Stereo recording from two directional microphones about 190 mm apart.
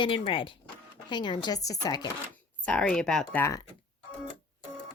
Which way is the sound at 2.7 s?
5° left (ahead or behind).